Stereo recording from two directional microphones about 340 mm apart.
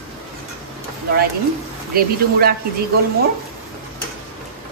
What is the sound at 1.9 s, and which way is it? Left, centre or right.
Speech, right.